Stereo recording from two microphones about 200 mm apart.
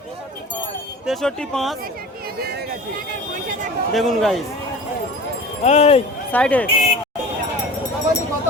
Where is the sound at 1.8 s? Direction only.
50° right (ahead or behind).